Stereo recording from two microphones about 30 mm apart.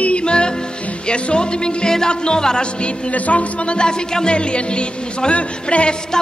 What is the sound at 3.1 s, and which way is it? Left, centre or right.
Speech, left.